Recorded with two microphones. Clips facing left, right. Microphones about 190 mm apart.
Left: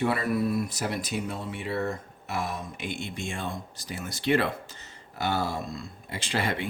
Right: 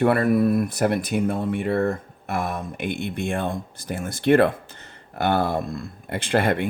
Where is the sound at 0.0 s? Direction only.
55° right (ahead or behind).